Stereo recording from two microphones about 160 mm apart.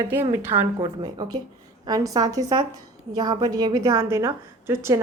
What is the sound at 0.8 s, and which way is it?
A woman's voice, 25° right (ahead or behind).